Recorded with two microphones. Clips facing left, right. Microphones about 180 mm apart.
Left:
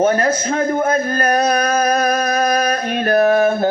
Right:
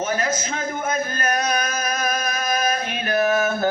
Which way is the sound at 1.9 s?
35° left (ahead or behind).